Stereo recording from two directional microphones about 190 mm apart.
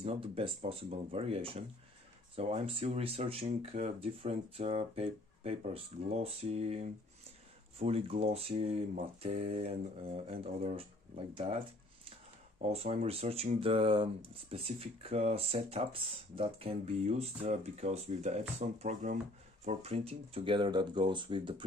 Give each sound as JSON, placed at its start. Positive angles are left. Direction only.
{"t": 0.0, "sound": "speech", "side_deg": -30}